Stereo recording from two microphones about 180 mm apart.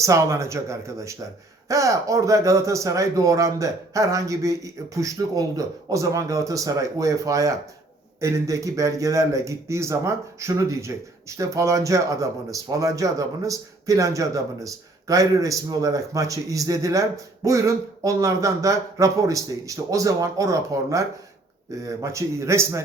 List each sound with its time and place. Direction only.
0.0 s a man's voice: 15° right (ahead or behind)